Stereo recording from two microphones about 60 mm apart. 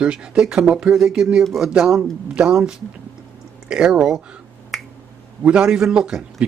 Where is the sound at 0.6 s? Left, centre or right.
Centre.